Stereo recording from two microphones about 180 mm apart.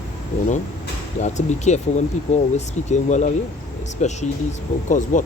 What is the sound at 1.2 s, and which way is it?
Speech, 40° left (ahead or behind).